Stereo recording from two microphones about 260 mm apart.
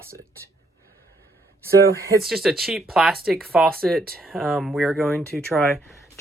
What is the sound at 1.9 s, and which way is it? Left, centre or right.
Speech, centre.